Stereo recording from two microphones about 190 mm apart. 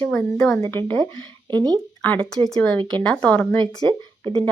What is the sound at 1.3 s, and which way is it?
Speech, 25° right (ahead or behind).